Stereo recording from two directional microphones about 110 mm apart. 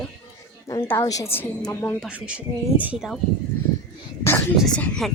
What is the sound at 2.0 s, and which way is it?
Speech, 10° right (ahead or behind).